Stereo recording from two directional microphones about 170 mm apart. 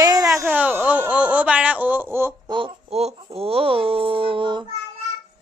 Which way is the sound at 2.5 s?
35° right (ahead or behind).